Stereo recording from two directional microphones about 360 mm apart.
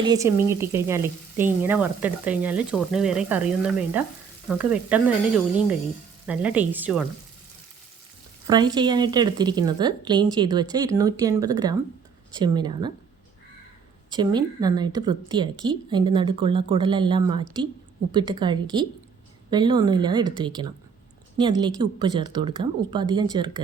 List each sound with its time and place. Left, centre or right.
0.0 s speech: centre
8.4 s a woman's voice: centre
14.1 s a woman's voice: centre